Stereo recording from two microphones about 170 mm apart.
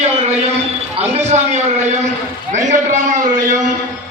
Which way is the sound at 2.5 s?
45° right (ahead or behind).